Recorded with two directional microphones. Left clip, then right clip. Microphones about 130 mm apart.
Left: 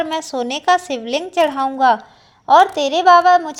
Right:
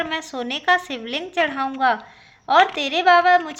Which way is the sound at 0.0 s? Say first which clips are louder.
Left 5 dB; 30° left (ahead or behind).